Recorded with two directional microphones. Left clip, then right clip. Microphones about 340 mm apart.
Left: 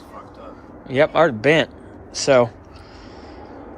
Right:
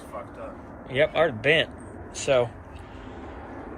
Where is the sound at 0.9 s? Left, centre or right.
Left.